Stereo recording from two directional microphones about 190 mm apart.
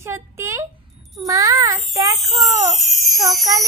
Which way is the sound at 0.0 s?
15° right (ahead or behind).